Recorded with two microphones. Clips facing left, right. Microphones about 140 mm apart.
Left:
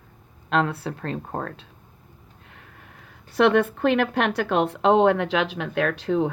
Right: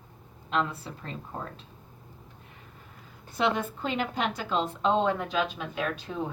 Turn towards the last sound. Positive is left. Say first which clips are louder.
# left 9 dB
turn(degrees=90)